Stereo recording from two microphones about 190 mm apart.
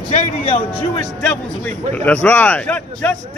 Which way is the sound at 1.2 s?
10° left (ahead or behind).